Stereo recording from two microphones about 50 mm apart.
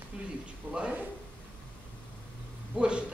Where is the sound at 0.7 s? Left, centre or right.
Right.